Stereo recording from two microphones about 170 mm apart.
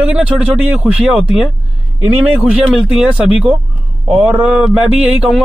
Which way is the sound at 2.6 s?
Centre (ahead or behind).